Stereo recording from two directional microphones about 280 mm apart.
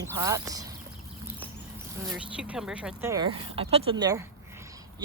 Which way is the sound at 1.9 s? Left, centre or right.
Centre.